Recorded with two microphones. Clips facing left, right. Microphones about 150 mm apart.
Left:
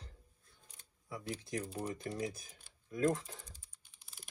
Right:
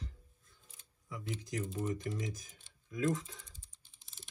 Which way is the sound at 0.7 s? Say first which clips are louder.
Left 1 dB; 40° left (ahead or behind).